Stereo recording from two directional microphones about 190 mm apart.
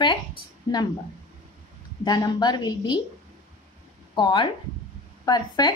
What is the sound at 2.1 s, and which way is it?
Speech, 20° left (ahead or behind).